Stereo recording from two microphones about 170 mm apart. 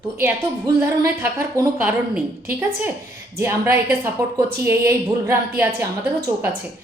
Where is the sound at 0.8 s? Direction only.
15° right (ahead or behind).